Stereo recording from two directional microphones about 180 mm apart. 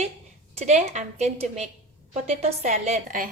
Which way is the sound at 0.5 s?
40° right (ahead or behind).